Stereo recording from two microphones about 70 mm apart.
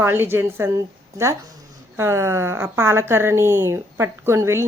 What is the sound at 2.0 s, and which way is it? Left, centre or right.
A woman's voice, right.